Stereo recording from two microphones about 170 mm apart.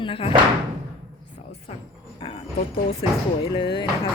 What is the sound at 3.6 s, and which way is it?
Speech, 25° left (ahead or behind).